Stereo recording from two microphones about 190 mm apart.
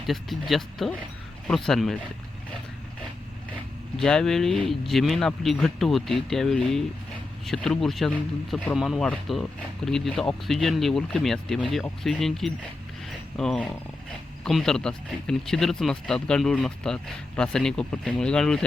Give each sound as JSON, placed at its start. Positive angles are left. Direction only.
{"t": 0.1, "sound": "speech", "side_deg": 0}
{"t": 3.9, "sound": "speech", "side_deg": 0}